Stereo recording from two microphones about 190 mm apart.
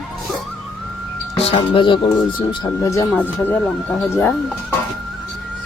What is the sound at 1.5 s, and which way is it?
Speech, 30° left (ahead or behind).